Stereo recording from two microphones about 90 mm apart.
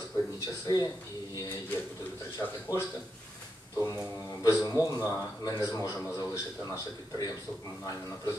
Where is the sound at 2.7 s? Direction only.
25° right (ahead or behind).